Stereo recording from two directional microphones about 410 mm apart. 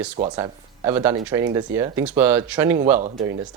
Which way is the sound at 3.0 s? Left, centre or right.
Centre.